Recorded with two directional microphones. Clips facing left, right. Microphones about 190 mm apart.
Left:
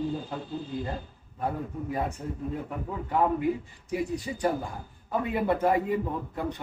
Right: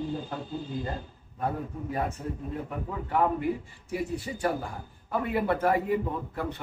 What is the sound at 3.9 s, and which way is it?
Speech, 15° left (ahead or behind).